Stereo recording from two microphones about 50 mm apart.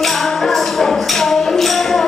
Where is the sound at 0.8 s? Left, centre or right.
Centre.